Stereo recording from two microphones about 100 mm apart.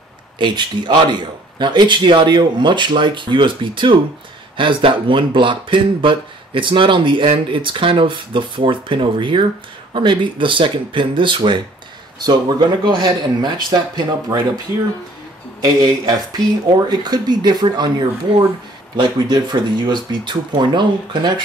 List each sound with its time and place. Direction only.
0.4 s speech: 50° right (ahead or behind)
15.6 s speech: 40° right (ahead or behind)